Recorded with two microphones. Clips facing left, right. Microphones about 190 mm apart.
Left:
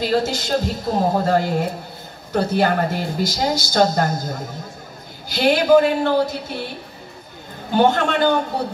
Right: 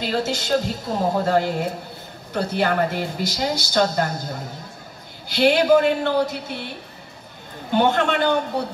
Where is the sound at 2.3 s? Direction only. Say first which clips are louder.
Left 3 dB; 40° left (ahead or behind).